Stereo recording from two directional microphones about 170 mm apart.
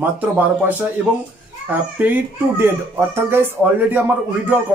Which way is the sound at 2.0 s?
10° right (ahead or behind).